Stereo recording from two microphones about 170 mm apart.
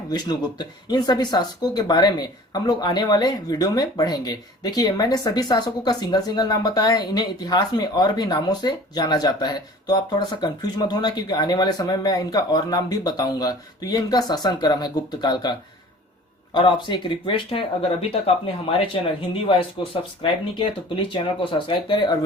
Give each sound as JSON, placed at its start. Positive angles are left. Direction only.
{"t": 0.1, "sound": "speech", "side_deg": 25}
{"t": 16.6, "sound": "speech", "side_deg": 25}